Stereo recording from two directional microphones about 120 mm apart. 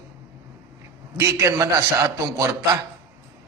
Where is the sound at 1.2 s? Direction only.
25° right (ahead or behind).